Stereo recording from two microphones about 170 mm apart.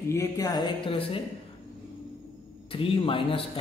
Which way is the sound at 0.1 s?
20° left (ahead or behind).